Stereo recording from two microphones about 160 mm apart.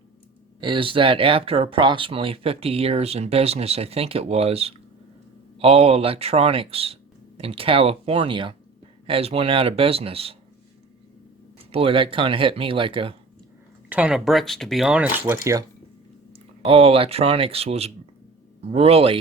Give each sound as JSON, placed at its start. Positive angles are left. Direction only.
{"t": 0.6, "sound": "speech", "side_deg": -30}
{"t": 11.7, "sound": "speech", "side_deg": -35}
{"t": 13.9, "sound": "speech", "side_deg": -5}
{"t": 15.3, "sound": "speech", "side_deg": -20}
{"t": 16.3, "sound": "speech", "side_deg": -35}